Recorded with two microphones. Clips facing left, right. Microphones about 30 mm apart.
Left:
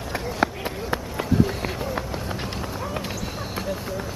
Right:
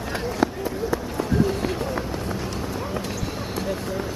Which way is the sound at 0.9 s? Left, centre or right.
Left.